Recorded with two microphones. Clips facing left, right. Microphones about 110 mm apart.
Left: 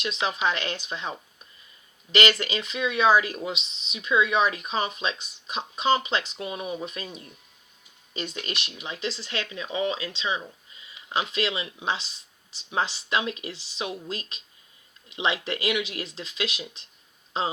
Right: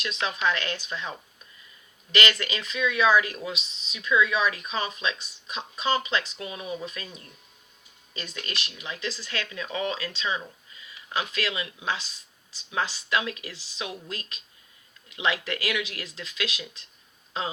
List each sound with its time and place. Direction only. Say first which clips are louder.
0.0 s speech: left 1 dB; 25° left (ahead or behind)
2.1 s speech: left 3 dB; 30° left (ahead or behind)